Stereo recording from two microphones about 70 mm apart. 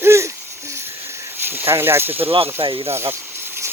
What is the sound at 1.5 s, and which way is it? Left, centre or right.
Speech, right.